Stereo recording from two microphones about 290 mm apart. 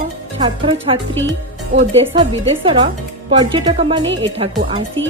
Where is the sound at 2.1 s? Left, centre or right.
Centre.